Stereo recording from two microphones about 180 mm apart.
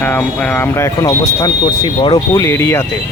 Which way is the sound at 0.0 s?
10° left (ahead or behind).